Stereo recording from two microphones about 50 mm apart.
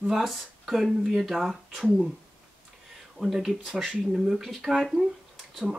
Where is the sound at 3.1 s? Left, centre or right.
Centre.